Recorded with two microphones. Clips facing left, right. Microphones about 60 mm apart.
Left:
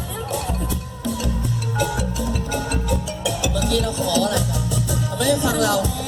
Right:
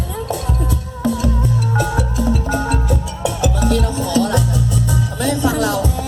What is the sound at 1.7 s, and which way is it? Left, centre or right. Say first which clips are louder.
Music: even; right.